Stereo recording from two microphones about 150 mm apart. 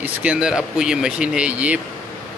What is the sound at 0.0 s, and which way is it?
Speech, 10° right (ahead or behind).